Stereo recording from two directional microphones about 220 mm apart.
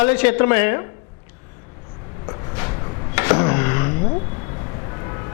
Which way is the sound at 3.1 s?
15° left (ahead or behind).